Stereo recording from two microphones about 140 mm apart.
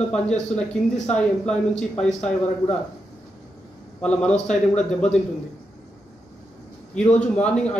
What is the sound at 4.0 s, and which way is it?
Speech, 5° left (ahead or behind).